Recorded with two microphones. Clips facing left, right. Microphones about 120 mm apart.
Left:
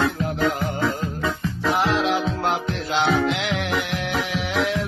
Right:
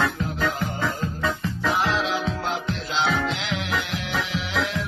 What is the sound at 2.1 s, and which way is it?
Music, 60° left (ahead or behind).